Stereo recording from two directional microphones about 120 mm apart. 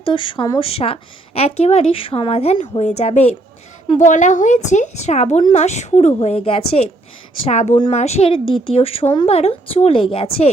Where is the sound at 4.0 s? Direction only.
90° left; by 6.9 s 55° left (ahead or behind).